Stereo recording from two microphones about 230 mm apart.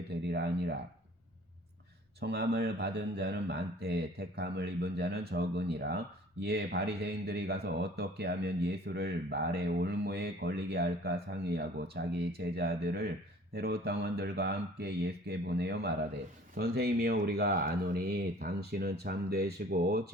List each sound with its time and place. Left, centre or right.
0.3 s speech: right
2.2 s speech: right